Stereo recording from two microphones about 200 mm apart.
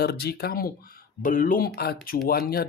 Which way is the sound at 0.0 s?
55° left (ahead or behind).